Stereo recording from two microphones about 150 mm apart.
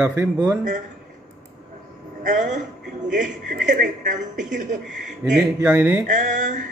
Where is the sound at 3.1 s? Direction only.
75° right (ahead or behind); by 4.8 s 60° right (ahead or behind).